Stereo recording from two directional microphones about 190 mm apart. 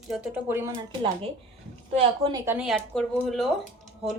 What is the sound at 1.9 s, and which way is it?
Speech, 30° right (ahead or behind).